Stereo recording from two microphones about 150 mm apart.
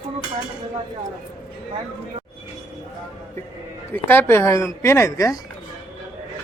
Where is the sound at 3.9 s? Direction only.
15° left (ahead or behind).